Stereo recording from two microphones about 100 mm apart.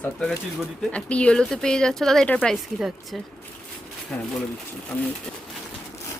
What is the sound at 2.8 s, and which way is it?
Speech, 5° right (ahead or behind).